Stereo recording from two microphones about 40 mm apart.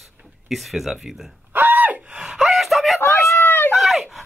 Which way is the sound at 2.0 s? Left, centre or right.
Right.